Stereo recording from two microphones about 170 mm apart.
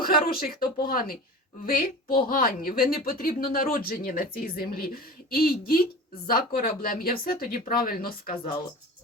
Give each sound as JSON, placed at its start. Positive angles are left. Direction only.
{"t": 0.0, "sound": "a woman's voice", "side_deg": 60}